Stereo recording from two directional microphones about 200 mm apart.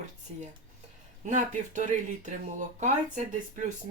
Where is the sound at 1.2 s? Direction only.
40° right (ahead or behind).